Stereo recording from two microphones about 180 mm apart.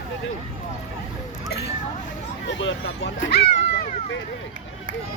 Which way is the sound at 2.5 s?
90° left.